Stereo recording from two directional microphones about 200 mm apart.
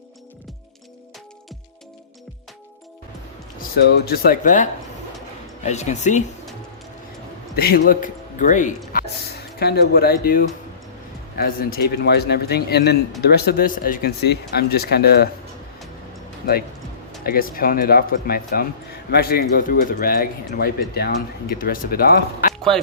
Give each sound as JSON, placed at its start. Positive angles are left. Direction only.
{"t": 4.0, "sound": "speech", "side_deg": 50}
{"t": 7.5, "sound": "speech", "side_deg": 50}
{"t": 8.9, "sound": "a sound", "side_deg": 50}
{"t": 11.3, "sound": "speech", "side_deg": 50}
{"t": 17.2, "sound": "speech", "side_deg": 45}